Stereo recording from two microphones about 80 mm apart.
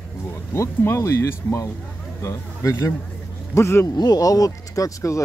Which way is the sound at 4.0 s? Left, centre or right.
Left.